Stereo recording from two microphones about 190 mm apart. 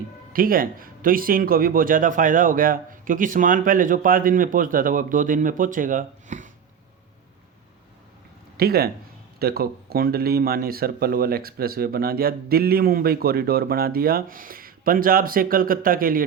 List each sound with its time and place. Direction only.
0.3 s speech: 50° right (ahead or behind)
8.5 s speech: 55° right (ahead or behind)